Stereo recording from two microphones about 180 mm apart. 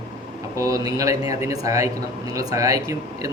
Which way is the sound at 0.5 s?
20° right (ahead or behind).